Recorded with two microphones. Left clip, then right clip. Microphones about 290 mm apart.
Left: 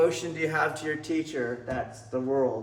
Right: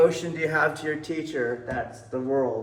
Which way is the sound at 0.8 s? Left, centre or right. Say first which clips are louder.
Right 1 dB; centre.